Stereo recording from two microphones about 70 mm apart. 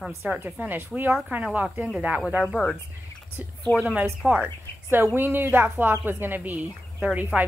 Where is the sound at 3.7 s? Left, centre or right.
Left.